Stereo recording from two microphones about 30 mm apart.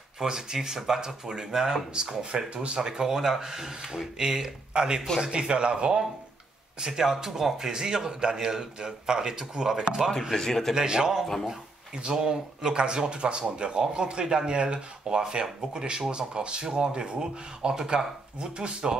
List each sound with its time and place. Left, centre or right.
0.2 s speech: right
2.3 s speech: right
2.8 s speech: right
10.3 s a man's voice: centre
10.7 s speech: right